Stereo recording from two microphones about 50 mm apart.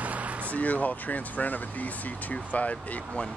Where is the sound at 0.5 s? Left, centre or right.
Left.